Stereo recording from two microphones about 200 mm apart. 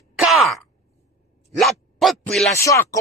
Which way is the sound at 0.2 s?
Centre (ahead or behind).